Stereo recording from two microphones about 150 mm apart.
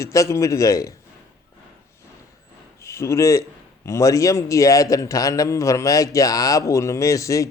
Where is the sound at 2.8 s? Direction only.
20° left (ahead or behind).